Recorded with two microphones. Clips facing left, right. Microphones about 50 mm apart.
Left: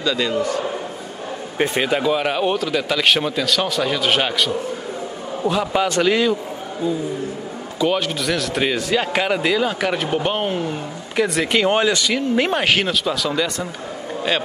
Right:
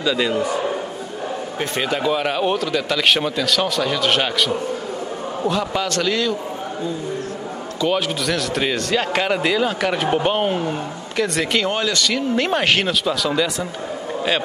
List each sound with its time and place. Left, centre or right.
0.0 s a man's voice: centre
1.6 s speech: centre
5.5 s a man's voice: centre
7.8 s a man's voice: centre
11.6 s a man's voice: centre
12.2 s speech: centre